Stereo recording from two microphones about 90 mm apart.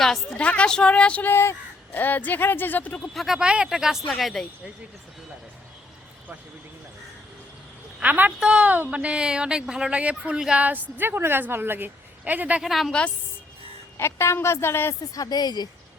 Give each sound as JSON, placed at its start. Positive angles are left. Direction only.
{"t": 0.0, "sound": "a woman's voice", "side_deg": 5}
{"t": 1.3, "sound": "speech", "side_deg": 25}
{"t": 3.2, "sound": "speech", "side_deg": -5}
{"t": 7.9, "sound": "a woman's voice", "side_deg": -15}
{"t": 12.6, "sound": "speech", "side_deg": 0}
{"t": 14.0, "sound": "speech", "side_deg": 30}
{"t": 15.1, "sound": "speech", "side_deg": 45}